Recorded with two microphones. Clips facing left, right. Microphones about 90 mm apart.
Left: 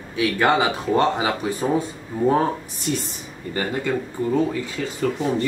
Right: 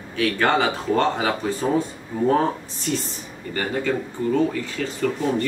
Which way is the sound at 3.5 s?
15° left (ahead or behind).